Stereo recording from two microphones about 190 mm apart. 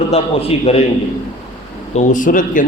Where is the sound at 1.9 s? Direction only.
45° left (ahead or behind).